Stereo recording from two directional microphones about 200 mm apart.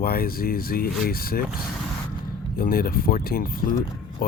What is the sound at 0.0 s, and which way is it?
Speech, 50° left (ahead or behind).